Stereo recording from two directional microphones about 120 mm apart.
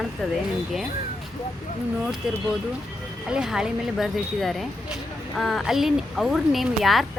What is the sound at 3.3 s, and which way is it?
Speech, 5° right (ahead or behind).